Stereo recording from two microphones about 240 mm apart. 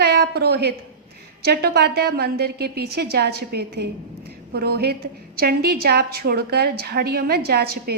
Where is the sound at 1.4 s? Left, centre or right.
Right.